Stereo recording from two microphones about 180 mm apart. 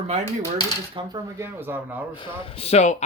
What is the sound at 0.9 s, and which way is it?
Speech, 20° right (ahead or behind).